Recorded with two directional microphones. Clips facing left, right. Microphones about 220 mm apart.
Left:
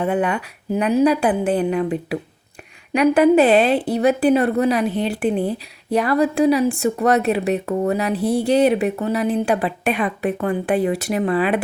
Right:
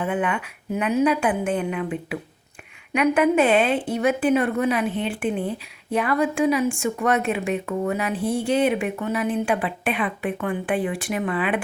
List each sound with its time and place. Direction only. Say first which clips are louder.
0.0 s a woman's voice: left 4 dB; 40° left (ahead or behind)